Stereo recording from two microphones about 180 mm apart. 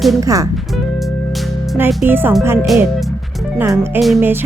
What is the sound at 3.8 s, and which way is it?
Speech, 10° right (ahead or behind).